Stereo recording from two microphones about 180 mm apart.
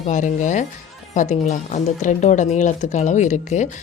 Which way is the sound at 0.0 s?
45° left (ahead or behind).